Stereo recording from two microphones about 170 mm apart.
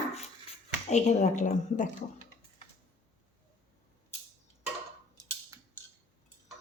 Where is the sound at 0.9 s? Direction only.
45° left (ahead or behind).